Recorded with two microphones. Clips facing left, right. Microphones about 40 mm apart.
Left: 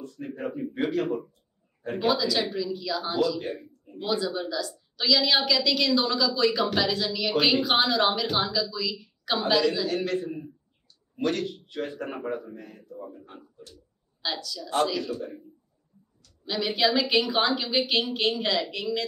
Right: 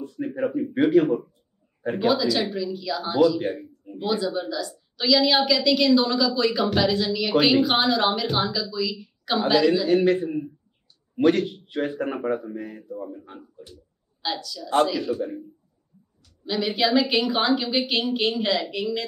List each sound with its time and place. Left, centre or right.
0.0 s speech: right
0.7 s a woman's voice: centre
4.0 s a woman's voice: centre
9.8 s a man's voice: right
14.2 s a woman's voice: centre
16.4 s a woman's voice: centre